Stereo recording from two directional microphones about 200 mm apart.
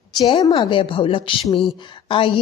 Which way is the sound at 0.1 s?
20° left (ahead or behind).